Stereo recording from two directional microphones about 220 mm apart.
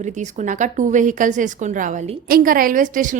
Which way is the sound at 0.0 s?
35° right (ahead or behind).